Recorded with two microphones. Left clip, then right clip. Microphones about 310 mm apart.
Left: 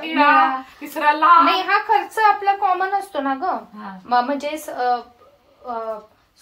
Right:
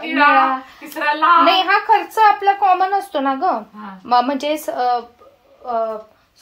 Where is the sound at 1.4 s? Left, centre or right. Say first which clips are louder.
Right 3 dB; right.